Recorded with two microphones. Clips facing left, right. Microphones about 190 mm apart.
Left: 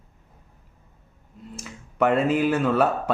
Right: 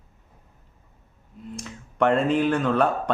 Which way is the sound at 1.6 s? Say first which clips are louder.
Even; 5° left (ahead or behind).